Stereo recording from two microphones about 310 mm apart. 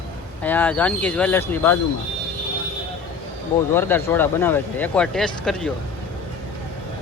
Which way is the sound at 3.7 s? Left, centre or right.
Centre.